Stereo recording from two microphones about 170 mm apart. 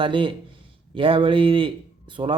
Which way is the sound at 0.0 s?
30° right (ahead or behind).